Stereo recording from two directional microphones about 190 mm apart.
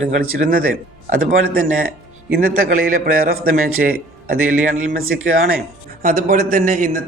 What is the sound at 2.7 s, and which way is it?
A man's voice, 50° right (ahead or behind).